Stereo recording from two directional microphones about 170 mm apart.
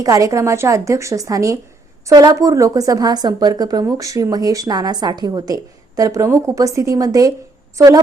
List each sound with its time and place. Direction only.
0.0 s a woman's voice: 20° right (ahead or behind)